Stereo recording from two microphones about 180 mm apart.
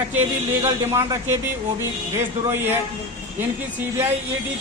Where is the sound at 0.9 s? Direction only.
15° right (ahead or behind).